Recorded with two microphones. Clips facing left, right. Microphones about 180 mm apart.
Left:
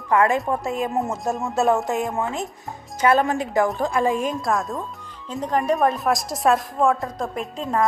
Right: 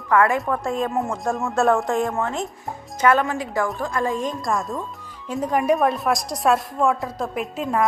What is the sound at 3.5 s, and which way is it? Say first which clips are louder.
Speech: left 4 dB; 20° left (ahead or behind).